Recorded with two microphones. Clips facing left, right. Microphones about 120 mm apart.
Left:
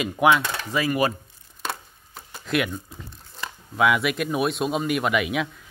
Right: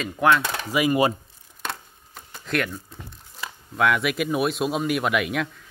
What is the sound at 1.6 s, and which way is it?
Chopping, 5° left (ahead or behind).